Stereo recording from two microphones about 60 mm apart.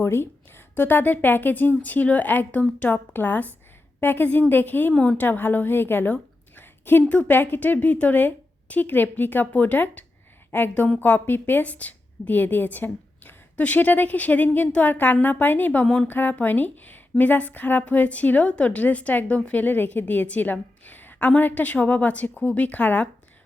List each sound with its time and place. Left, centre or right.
0.0 s a woman's voice: left
6.6 s a sound: left
7.0 s a woman's voice: left